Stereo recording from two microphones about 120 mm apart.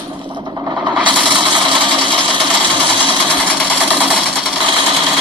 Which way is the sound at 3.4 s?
10° left (ahead or behind).